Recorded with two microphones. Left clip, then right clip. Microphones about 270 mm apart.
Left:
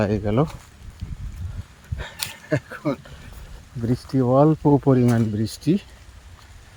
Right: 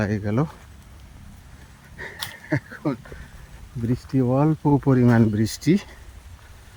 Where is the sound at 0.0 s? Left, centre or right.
Centre.